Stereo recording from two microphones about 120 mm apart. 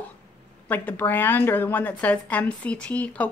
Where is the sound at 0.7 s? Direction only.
15° left (ahead or behind).